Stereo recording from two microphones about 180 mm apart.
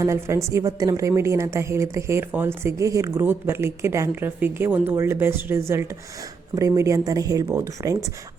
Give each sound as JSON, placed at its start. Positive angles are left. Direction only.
{"t": 0.0, "sound": "a woman's voice", "side_deg": -15}